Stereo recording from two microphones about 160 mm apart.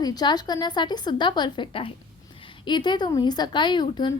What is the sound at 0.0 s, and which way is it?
A woman's voice, 25° left (ahead or behind).